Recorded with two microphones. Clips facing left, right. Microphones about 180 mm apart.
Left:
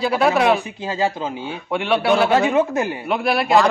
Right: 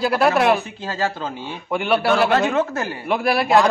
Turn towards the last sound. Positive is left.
turn(degrees=0)  # may be behind; listen again after turning